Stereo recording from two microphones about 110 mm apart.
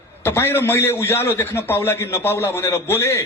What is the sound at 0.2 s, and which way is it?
A man's voice, 20° left (ahead or behind).